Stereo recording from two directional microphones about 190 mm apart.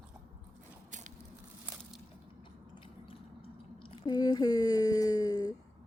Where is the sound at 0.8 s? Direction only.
40° right (ahead or behind).